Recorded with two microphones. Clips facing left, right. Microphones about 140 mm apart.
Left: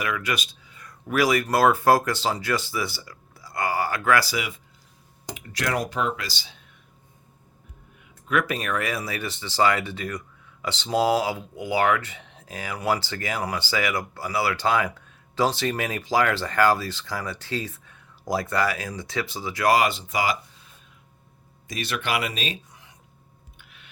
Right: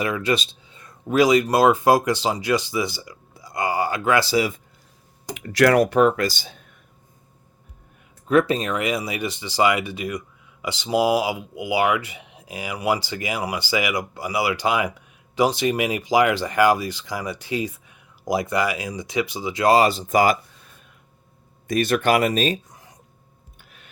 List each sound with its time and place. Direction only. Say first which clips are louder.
0.0 s speech: right 5 dB; 30° right (ahead or behind)
5.3 s speech: right 11 dB; 75° right (ahead or behind); by 6.7 s 50° right (ahead or behind)
8.3 s speech: right 6 dB; 30° right (ahead or behind); by 20.4 s 50° right (ahead or behind)
21.7 s speech: right 9 dB; 50° right (ahead or behind)
23.6 s a sound: right 2 dB; 45° right (ahead or behind)